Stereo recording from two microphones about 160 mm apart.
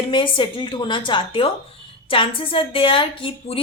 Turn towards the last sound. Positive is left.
turn(degrees=35)  # may be behind; listen again after turning